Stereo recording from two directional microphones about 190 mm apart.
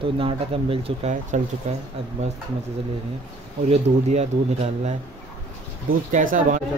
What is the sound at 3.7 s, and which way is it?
Speech, 35° right (ahead or behind).